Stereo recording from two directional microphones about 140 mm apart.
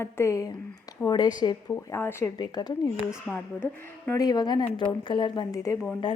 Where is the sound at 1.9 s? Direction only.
15° left (ahead or behind).